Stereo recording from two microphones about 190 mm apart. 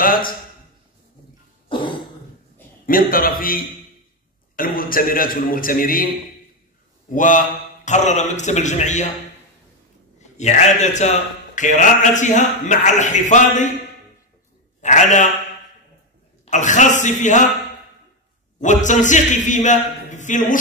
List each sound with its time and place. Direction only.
0.0 s a sound: 50° left (ahead or behind)
1.7 s cough: 25° left (ahead or behind)
2.9 s a man's voice: 50° left (ahead or behind)
7.2 s a man's voice: 40° left (ahead or behind)
10.3 s a man's voice: 40° left (ahead or behind)
14.8 s a man's voice: 40° left (ahead or behind)
16.4 s a man's voice: 40° left (ahead or behind)
18.6 s a man's voice: 40° left (ahead or behind)